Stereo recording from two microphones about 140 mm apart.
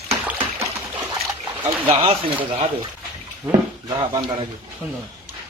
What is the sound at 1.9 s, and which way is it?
Speech, 40° right (ahead or behind).